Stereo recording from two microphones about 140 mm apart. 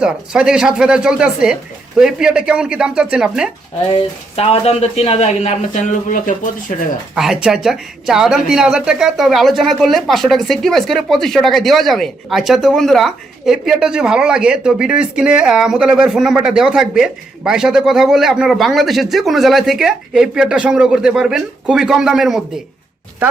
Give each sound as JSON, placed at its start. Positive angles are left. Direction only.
{"t": 0.0, "sound": "speech", "side_deg": -5}
{"t": 4.4, "sound": "a man's voice", "side_deg": 45}
{"t": 7.2, "sound": "speech", "side_deg": -5}